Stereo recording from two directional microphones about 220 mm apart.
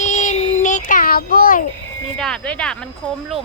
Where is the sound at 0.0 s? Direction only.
35° left (ahead or behind).